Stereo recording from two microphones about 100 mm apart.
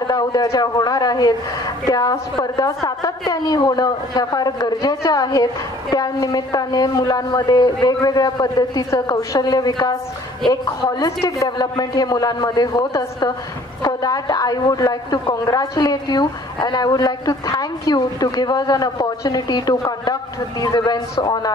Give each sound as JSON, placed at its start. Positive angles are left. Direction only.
{"t": 0.0, "sound": "a man's voice", "side_deg": 45}
{"t": 3.3, "sound": "a woman's voice", "side_deg": 40}